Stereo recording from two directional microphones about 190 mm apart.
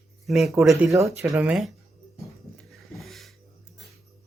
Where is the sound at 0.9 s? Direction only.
15° right (ahead or behind).